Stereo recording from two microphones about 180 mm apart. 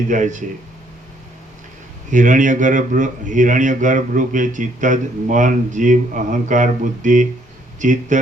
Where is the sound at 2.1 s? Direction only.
45° right (ahead or behind).